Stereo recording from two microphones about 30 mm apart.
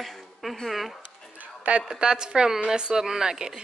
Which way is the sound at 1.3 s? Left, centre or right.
Right.